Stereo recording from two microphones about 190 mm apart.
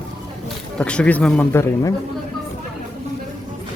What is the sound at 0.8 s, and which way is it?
Speech, 5° left (ahead or behind).